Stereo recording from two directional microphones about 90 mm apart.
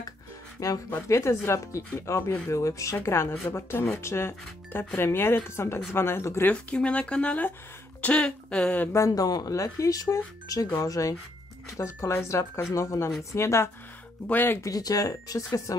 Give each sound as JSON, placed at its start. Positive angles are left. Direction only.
{"t": 0.6, "sound": "speech", "side_deg": 40}
{"t": 6.5, "sound": "speech", "side_deg": 15}
{"t": 8.9, "sound": "speech", "side_deg": 40}
{"t": 14.2, "sound": "speech", "side_deg": 20}
{"t": 14.6, "sound": "speech", "side_deg": 45}